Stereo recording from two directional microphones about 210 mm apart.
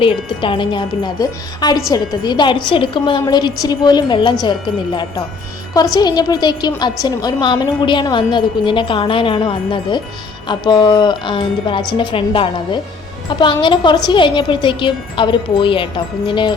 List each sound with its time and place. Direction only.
0.0 s a woman's voice: 25° left (ahead or behind)